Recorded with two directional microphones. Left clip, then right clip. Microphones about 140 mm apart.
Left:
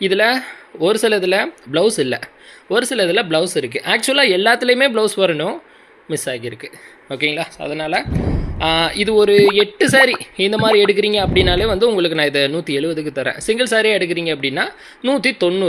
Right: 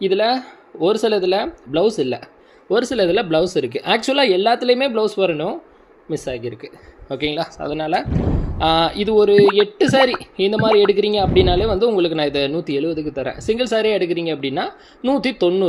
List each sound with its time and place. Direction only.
0.0 s speech: centre (ahead or behind)
2.6 s speech: 15° right (ahead or behind)
4.2 s speech: centre (ahead or behind); by 8.0 s 20° right (ahead or behind)
8.1 s a sound: centre (ahead or behind)
8.5 s speech: 20° right (ahead or behind)